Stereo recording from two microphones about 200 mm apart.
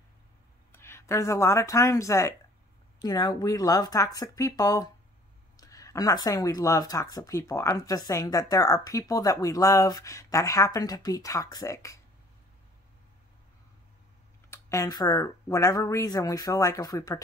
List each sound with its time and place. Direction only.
0.7 s speech: 15° left (ahead or behind)
14.5 s speech: 15° left (ahead or behind)